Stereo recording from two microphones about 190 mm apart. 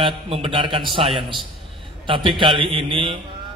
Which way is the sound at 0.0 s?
30° right (ahead or behind).